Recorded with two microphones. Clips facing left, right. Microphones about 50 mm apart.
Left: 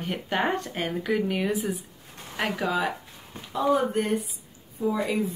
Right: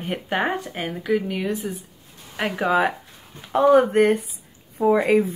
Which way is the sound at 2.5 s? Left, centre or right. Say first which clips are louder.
Right 8 dB; right.